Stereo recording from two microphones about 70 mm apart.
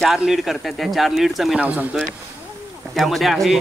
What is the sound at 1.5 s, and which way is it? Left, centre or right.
Speech, centre.